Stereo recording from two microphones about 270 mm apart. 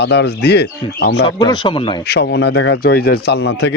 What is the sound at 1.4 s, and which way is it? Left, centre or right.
Speech, centre.